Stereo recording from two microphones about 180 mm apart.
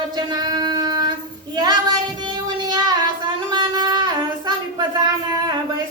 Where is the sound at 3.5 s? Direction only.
25° right (ahead or behind).